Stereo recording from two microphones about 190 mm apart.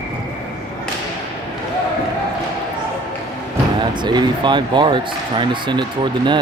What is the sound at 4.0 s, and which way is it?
Speech, 25° right (ahead or behind).